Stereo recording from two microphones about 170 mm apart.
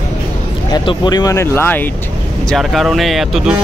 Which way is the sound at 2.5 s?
Centre (ahead or behind).